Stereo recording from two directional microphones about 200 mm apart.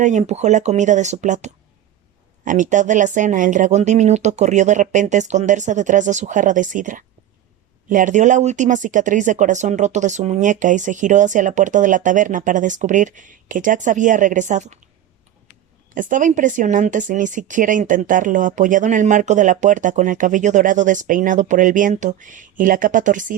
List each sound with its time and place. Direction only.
0.0 s speech: 35° right (ahead or behind)
16.0 s speech: 40° right (ahead or behind)